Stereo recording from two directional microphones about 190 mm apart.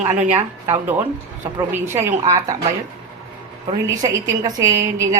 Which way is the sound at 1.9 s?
40° right (ahead or behind).